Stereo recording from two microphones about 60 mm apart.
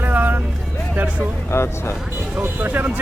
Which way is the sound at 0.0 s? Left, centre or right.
Right.